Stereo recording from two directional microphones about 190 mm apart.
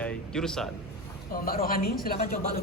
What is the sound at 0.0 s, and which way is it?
Air conditioning, 5° left (ahead or behind).